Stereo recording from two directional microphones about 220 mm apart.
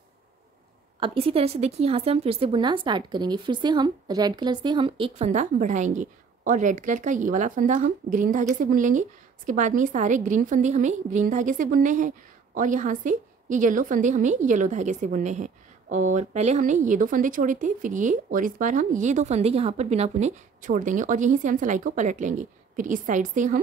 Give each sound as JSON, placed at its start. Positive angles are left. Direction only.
{"t": 0.9, "sound": "a woman's voice", "side_deg": -25}